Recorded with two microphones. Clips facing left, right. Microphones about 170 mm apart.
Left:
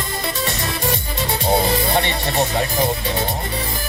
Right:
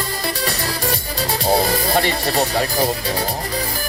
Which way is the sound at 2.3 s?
35° right (ahead or behind).